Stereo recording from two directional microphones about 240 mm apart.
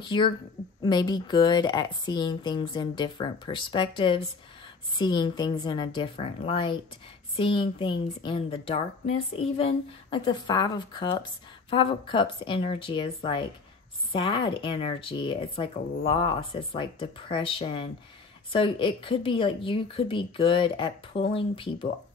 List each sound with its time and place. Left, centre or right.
0.0 s a woman's voice: centre